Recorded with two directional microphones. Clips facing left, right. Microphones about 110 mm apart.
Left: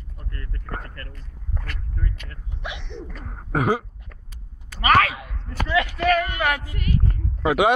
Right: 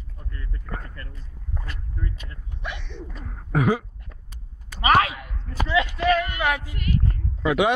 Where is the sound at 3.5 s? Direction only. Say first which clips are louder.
Even; 50° left (ahead or behind).